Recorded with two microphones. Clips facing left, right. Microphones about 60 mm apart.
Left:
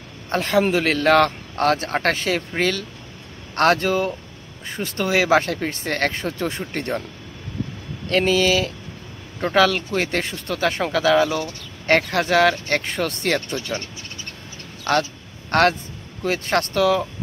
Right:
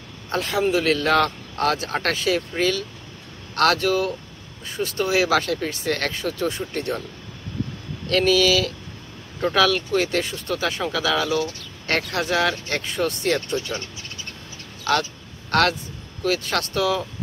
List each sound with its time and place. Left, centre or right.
0.3 s speech: left
8.1 s speech: left
13.7 s speech: left
14.9 s speech: left